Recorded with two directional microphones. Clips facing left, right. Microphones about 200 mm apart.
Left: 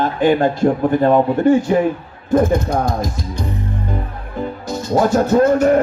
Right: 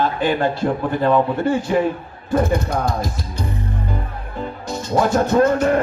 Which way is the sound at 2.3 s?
45° left (ahead or behind).